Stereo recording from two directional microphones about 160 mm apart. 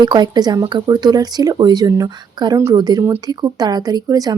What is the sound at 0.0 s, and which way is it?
A woman's voice, 25° right (ahead or behind).